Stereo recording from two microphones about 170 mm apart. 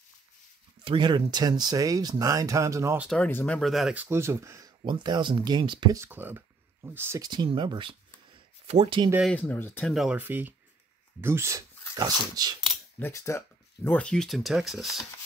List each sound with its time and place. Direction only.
0.8 s speech: 30° right (ahead or behind)
3.1 s speech: 10° left (ahead or behind); by 6.0 s 25° right (ahead or behind)
6.0 s speech: 10° right (ahead or behind)
7.2 s speech: 25° right (ahead or behind)
9.2 s speech: 10° left (ahead or behind)
9.9 s speech: 10° right (ahead or behind); by 12.5 s 25° right (ahead or behind)
13.0 s speech: 15° left (ahead or behind); by 15.0 s centre (ahead or behind)